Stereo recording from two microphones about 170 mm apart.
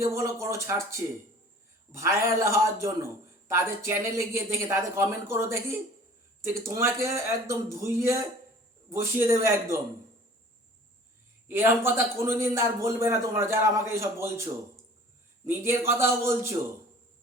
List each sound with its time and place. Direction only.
0.0 s a man's voice: 15° right (ahead or behind)
11.4 s a man's voice: 15° right (ahead or behind)
15.4 s a man's voice: 15° right (ahead or behind)